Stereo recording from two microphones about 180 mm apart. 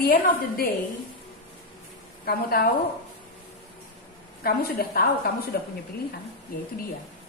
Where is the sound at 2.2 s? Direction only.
60° left (ahead or behind).